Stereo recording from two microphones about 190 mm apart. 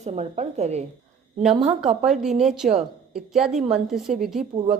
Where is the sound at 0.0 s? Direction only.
35° right (ahead or behind).